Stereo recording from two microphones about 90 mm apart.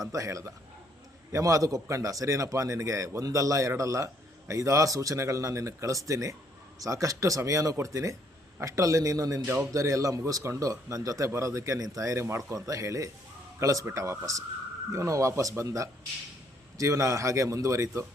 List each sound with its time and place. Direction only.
0.1 s a man's voice: 35° right (ahead or behind)